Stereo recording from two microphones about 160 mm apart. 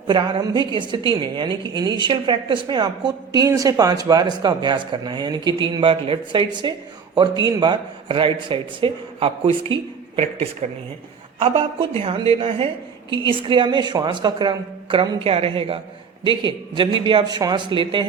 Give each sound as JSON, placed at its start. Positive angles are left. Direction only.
{"t": 0.1, "sound": "a woman's voice", "side_deg": -25}